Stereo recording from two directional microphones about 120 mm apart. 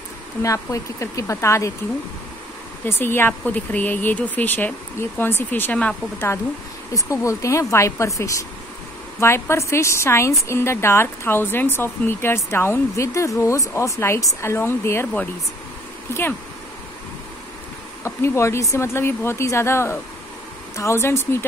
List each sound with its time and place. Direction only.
0.4 s speech: 25° left (ahead or behind)
2.8 s speech: 20° left (ahead or behind)
18.0 s speech: 25° left (ahead or behind)